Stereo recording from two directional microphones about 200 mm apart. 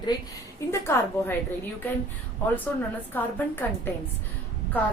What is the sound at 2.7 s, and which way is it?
Speech, 10° left (ahead or behind).